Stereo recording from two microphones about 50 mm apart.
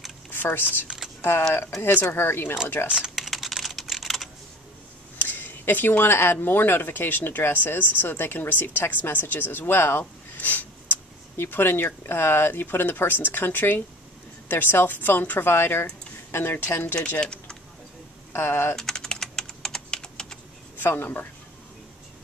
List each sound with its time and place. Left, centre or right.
0.3 s speech: left
0.8 s typing: centre
2.0 s speech: left
3.2 s computer keyboard: centre
5.2 s a sound: left
6.3 s speech: left
10.3 s a sound: left
11.3 s speech: left
15.5 s speech: left
16.5 s speech: left
17.2 s speech: centre
18.3 s speech: left
18.8 s typing: centre
20.7 s speech: left